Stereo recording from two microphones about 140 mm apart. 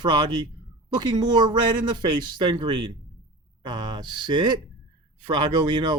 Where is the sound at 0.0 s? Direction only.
35° right (ahead or behind).